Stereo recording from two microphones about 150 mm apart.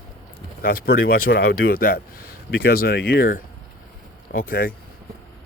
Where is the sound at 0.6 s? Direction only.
85° left.